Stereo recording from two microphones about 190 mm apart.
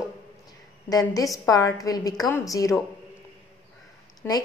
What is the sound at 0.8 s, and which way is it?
A woman's voice, 20° left (ahead or behind).